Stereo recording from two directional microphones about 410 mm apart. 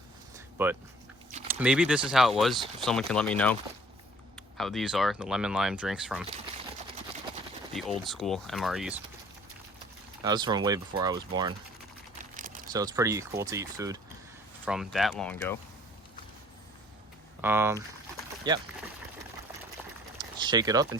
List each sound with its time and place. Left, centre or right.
0.3 s a sound: centre
1.5 s speech: centre
7.7 s speech: centre
10.2 s speech: centre
12.7 s speech: centre
17.4 s speech: centre
20.4 s speech: centre